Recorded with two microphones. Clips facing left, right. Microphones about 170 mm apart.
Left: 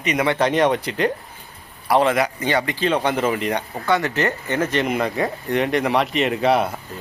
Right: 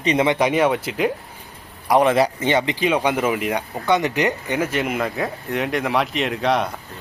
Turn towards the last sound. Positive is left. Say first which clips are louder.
# left 2 dB
turn(degrees=5)  # may be behind; listen again after turning